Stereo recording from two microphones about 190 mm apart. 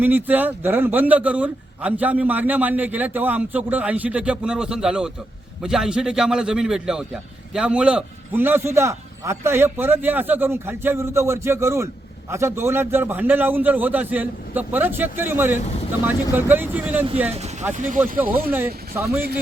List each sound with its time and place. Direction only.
0.0 s a man's voice: 10° right (ahead or behind)
17.7 s speech: 40° right (ahead or behind)